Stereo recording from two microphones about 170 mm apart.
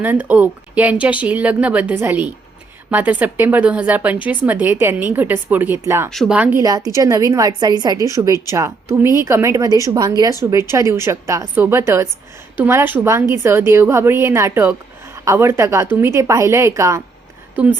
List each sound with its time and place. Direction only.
0.0 s a woman's voice: 10° right (ahead or behind)
6.1 s speech: centre (ahead or behind)
6.6 s a woman's voice: 20° right (ahead or behind)